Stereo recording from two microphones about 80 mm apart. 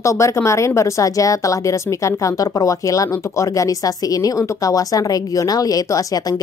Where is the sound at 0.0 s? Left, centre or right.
Left.